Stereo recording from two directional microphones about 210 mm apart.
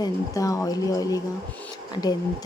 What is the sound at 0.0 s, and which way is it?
Speech, 15° left (ahead or behind).